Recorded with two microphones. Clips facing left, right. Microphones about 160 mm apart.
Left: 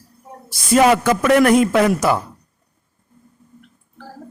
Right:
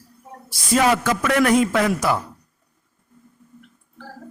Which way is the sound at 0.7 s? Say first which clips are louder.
Left 5 dB; 55° left (ahead or behind).